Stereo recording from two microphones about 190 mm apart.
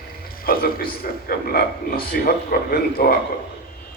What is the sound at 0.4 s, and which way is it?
A man's voice, 50° left (ahead or behind).